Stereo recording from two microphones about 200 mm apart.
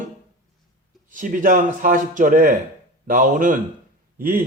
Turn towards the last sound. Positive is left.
turn(degrees=-45)  # may be behind; listen again after turning